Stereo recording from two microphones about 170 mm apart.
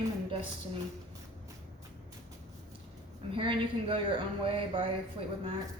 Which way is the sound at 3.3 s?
30° right (ahead or behind).